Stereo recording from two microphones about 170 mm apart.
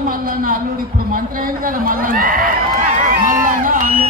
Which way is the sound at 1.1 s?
55° right (ahead or behind).